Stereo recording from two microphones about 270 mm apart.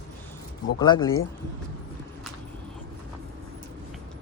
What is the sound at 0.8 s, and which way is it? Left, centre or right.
Speech, centre.